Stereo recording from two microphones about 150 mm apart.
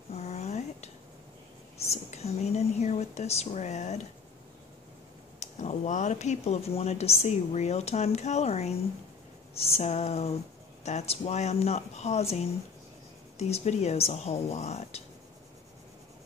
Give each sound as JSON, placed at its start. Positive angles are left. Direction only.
{"t": 0.1, "sound": "dishes", "side_deg": 45}
{"t": 1.9, "sound": "speech", "side_deg": 45}
{"t": 5.4, "sound": "speech", "side_deg": 50}